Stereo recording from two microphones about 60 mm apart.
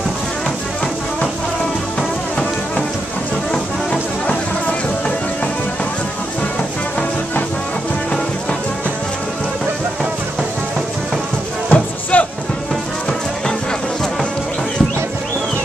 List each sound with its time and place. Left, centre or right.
3.5 s music: centre
11.7 s music: left